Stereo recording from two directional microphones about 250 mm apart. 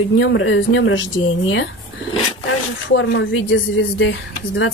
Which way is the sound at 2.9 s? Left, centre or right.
Left.